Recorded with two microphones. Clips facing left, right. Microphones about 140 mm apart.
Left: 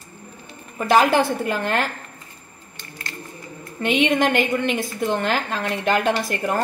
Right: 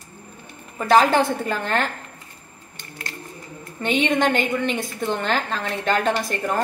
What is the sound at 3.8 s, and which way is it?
A woman's voice, 5° left (ahead or behind).